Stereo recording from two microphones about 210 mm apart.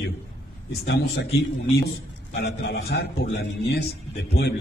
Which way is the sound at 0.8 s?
50° left (ahead or behind).